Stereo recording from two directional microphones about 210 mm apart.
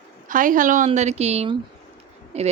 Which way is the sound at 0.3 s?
40° right (ahead or behind).